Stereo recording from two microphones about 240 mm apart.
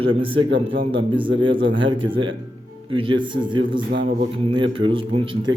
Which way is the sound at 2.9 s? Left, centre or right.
Right.